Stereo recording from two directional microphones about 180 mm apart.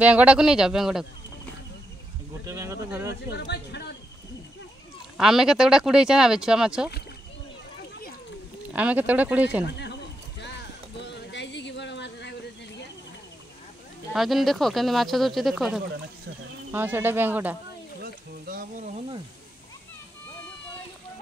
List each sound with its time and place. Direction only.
0.0 s speech: 5° right (ahead or behind)
2.4 s speech: 15° right (ahead or behind)
3.3 s speech: 70° left (ahead or behind)
5.1 s speech: centre (ahead or behind)
8.7 s speech: 10° right (ahead or behind)
9.7 s speech: 70° left (ahead or behind)
10.4 s a sound: 75° left (ahead or behind)
14.1 s speech: centre (ahead or behind)
18.0 s a sound: 55° right (ahead or behind)